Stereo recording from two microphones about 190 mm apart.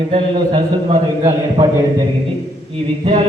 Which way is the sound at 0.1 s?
30° right (ahead or behind).